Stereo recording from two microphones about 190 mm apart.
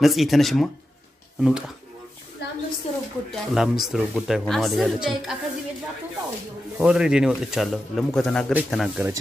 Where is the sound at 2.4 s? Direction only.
65° left (ahead or behind).